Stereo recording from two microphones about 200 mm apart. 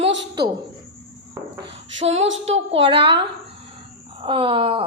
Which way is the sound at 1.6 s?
65° right (ahead or behind).